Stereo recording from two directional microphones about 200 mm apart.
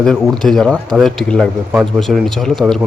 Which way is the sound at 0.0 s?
Centre (ahead or behind).